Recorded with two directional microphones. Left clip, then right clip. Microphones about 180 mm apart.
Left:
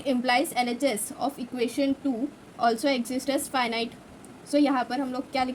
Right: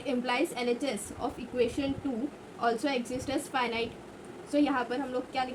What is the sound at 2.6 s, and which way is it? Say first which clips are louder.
A woman's voice: left 5 dB; 90° left.